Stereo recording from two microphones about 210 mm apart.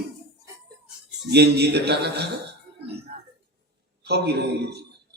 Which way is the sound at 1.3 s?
50° right (ahead or behind).